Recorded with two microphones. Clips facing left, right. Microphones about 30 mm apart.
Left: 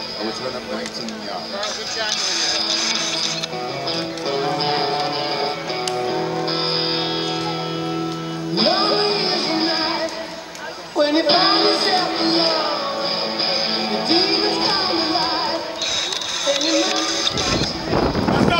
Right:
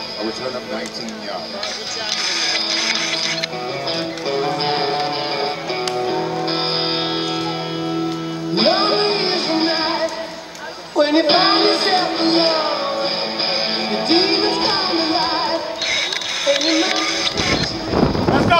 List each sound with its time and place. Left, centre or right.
4.3 s music: centre
16.4 s boat: right
17.9 s a sound: centre